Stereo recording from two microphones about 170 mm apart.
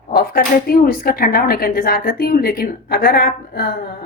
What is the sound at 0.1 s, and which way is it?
Speech, 60° left (ahead or behind).